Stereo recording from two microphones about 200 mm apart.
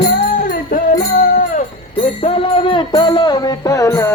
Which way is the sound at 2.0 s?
30° left (ahead or behind).